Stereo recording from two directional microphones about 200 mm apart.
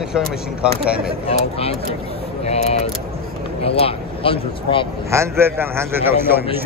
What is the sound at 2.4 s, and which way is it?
Speech, 30° left (ahead or behind).